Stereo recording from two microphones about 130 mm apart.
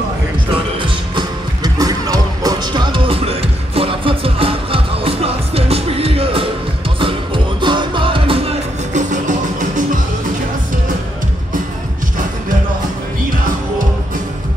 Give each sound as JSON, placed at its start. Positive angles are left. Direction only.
{"t": 0.7, "sound": "music", "side_deg": -40}
{"t": 8.9, "sound": "music", "side_deg": -70}